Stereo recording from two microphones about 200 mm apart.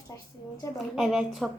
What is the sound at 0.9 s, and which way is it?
Speech, 5° right (ahead or behind).